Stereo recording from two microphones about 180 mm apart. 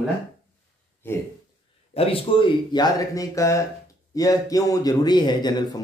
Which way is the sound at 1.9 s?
30° left (ahead or behind).